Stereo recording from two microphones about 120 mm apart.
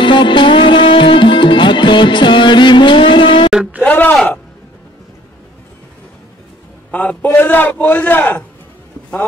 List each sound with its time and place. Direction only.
0.0 s music: 40° left (ahead or behind)
3.8 s a sound: 15° left (ahead or behind)
6.9 s a man's voice: 15° left (ahead or behind)